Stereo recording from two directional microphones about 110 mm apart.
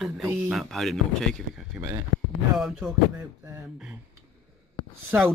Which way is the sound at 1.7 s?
5° right (ahead or behind).